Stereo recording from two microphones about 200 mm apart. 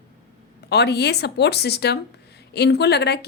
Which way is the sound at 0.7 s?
55° left (ahead or behind).